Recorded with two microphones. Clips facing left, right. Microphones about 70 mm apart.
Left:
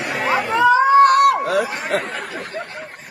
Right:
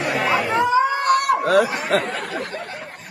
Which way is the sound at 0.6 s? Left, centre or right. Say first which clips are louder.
Left 10 dB; left.